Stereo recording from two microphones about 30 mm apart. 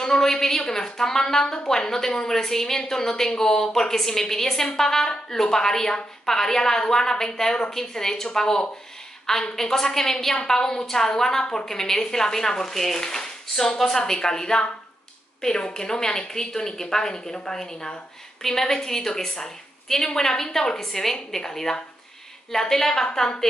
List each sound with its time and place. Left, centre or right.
0.0 s a woman's voice: centre
13.0 s a woman's voice: left